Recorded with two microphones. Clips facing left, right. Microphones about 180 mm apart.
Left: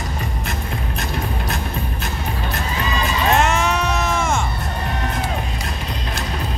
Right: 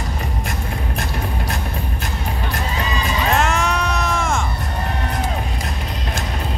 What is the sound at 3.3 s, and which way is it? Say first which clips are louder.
Sheep: left 1 dB; centre (ahead or behind).